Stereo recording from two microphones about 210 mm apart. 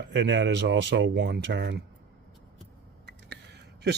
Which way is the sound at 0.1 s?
55° right (ahead or behind).